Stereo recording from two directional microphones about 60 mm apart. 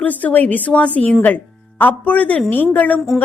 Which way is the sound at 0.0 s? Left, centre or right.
Left.